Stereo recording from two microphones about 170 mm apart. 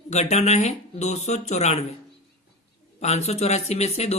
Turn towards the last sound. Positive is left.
turn(degrees=40)  # may be behind; listen again after turning